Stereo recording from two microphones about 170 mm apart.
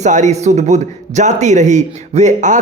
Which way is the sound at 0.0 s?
45° right (ahead or behind).